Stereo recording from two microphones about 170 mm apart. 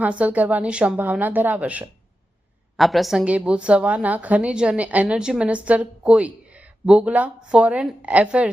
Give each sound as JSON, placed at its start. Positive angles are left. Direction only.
{"t": 0.0, "sound": "a woman's voice", "side_deg": -10}